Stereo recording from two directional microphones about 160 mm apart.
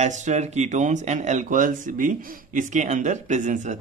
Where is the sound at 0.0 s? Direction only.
45° right (ahead or behind).